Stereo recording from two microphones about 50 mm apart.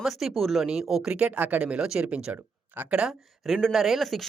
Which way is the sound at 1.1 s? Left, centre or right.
Right.